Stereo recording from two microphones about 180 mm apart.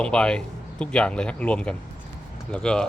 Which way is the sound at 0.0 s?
5° left (ahead or behind).